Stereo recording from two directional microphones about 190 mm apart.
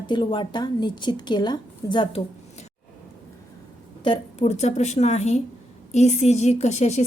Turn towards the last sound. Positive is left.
turn(degrees=35)  # may be behind; listen again after turning